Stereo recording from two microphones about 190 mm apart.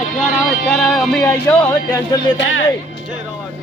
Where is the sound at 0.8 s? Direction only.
Centre (ahead or behind).